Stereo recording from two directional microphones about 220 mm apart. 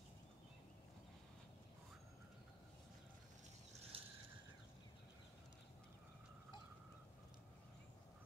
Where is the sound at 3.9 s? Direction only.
25° right (ahead or behind).